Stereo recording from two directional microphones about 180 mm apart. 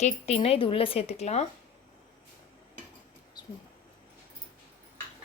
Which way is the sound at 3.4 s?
25° left (ahead or behind).